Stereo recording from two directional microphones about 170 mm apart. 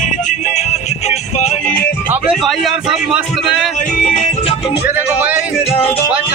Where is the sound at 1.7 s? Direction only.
60° left (ahead or behind).